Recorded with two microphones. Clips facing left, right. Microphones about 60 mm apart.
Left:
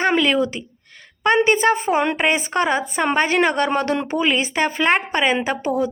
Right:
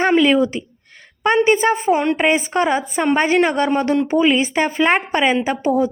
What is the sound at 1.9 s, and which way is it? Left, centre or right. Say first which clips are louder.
Speech: right 2 dB; left.